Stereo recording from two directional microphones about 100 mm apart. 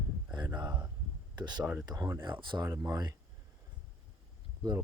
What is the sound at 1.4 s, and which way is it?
Speech, 45° right (ahead or behind).